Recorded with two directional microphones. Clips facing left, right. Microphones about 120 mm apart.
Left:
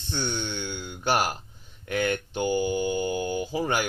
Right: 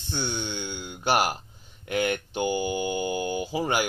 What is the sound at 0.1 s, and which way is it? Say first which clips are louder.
Speech: even; 10° right (ahead or behind).